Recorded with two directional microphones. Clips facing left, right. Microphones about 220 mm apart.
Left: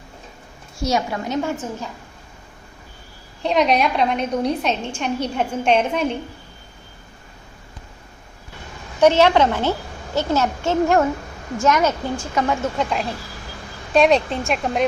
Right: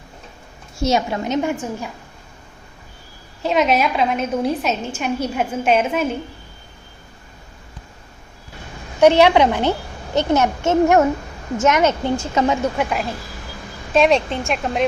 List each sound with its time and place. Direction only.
0.8 s a woman's voice: 25° right (ahead or behind)
3.4 s a woman's voice: 5° right (ahead or behind)
9.0 s a woman's voice: 15° right (ahead or behind)
12.7 s a woman's voice: 10° right (ahead or behind)